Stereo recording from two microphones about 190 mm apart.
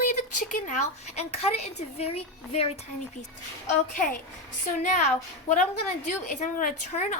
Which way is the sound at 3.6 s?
45° left (ahead or behind).